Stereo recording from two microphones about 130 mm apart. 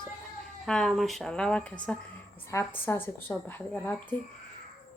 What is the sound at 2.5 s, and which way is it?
A woman's voice, 20° left (ahead or behind).